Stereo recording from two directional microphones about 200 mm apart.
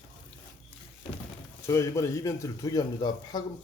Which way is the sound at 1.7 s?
15° left (ahead or behind).